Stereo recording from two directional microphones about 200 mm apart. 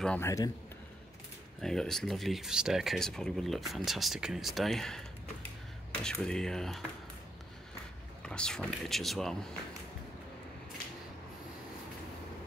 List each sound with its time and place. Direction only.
0.0 s a man's voice: 10° left (ahead or behind)
1.6 s speech: centre (ahead or behind)
6.0 s speech: 5° left (ahead or behind)
8.2 s speech: 5° left (ahead or behind)